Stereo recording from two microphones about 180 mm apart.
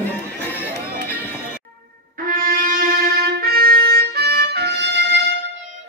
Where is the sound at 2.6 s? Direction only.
50° right (ahead or behind).